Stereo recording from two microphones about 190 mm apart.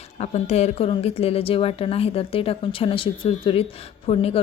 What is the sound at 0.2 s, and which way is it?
A woman's voice, 35° left (ahead or behind).